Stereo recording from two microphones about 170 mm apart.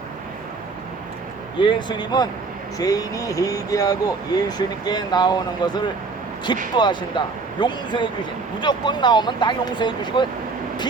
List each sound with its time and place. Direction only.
1.5 s speech: 25° left (ahead or behind)